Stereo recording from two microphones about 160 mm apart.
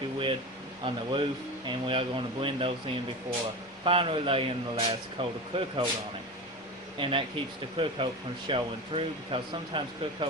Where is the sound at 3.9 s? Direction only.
35° right (ahead or behind).